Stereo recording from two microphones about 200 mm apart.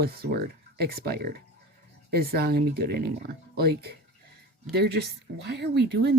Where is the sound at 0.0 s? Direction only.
50° right (ahead or behind).